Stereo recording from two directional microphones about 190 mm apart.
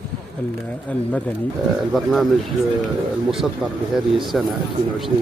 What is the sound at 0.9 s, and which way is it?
Speech, 5° left (ahead or behind).